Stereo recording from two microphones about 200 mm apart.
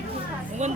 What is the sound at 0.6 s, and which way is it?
Speech, 35° right (ahead or behind).